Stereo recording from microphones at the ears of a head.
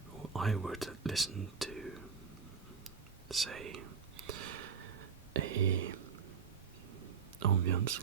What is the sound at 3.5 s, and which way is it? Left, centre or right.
Whispering, right.